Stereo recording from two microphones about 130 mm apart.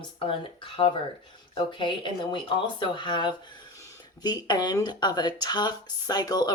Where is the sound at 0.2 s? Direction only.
40° left (ahead or behind).